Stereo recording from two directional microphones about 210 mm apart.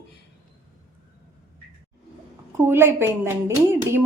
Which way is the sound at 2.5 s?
10° right (ahead or behind).